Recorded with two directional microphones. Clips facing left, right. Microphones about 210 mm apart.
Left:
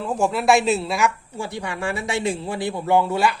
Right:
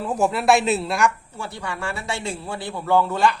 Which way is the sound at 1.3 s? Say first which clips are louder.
Left 3 dB; 15° left (ahead or behind).